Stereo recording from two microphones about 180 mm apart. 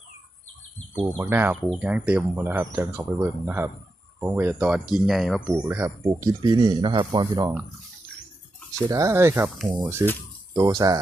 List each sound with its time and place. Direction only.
1.2 s speech: 10° right (ahead or behind)
8.9 s speech: 20° right (ahead or behind)